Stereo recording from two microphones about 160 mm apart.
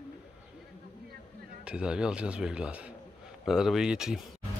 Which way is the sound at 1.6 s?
5° right (ahead or behind).